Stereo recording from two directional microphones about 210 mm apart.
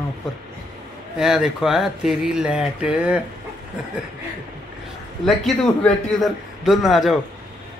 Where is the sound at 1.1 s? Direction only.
Centre (ahead or behind).